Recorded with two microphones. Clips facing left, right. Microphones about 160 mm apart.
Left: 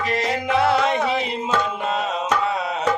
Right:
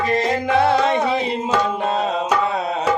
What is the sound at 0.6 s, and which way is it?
Music, 25° right (ahead or behind).